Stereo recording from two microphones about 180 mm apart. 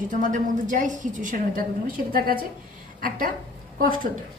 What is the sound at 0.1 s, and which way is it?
A woman's voice, 45° right (ahead or behind).